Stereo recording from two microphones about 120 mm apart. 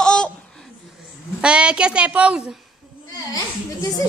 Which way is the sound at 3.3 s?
30° left (ahead or behind).